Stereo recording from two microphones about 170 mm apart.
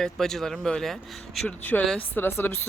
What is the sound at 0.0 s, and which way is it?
Speech, centre (ahead or behind).